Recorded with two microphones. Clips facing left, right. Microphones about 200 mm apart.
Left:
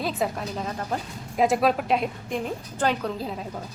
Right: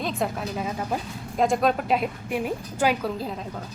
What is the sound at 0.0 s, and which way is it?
Speech, centre (ahead or behind).